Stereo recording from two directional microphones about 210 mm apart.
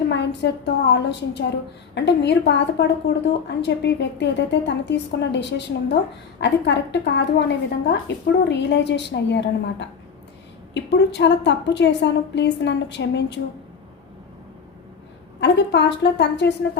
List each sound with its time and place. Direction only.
0.1 s a woman's voice: 55° left (ahead or behind)
15.4 s a woman's voice: 55° left (ahead or behind)